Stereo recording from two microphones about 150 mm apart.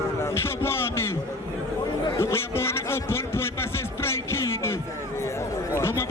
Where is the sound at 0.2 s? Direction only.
15° left (ahead or behind).